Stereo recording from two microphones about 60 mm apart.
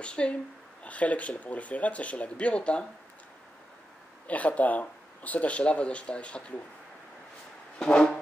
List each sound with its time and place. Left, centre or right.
0.0 s speech: centre
4.3 s speech: left
7.8 s speech: centre